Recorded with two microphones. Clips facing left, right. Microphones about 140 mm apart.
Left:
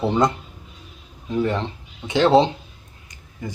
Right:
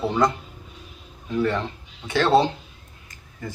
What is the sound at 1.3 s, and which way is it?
Speech, 20° left (ahead or behind).